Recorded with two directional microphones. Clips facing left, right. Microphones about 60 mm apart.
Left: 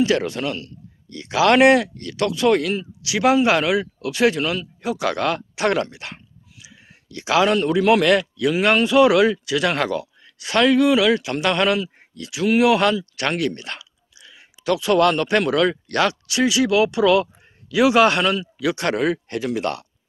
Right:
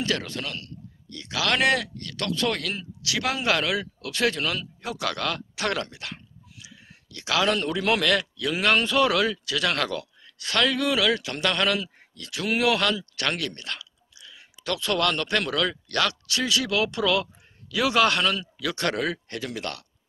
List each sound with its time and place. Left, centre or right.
0.0 s speech: centre
1.1 s speech: left
8.0 s speech: left
8.5 s speech: centre